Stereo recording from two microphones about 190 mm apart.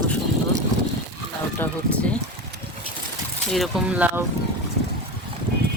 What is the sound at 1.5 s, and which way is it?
Speech, 5° left (ahead or behind).